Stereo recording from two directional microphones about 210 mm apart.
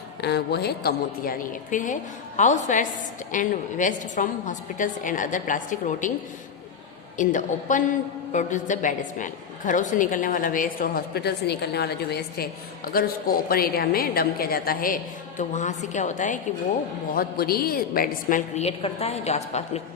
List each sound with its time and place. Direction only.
0.2 s a woman's voice: 50° left (ahead or behind)
7.2 s a woman's voice: 35° left (ahead or behind)
17.2 s a woman's voice: 45° left (ahead or behind); by 19.8 s 30° left (ahead or behind)